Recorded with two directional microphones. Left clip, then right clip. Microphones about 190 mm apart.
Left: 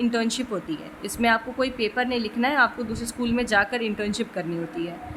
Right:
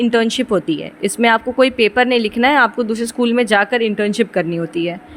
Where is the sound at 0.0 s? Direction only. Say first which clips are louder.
Right 10 dB; 35° right (ahead or behind).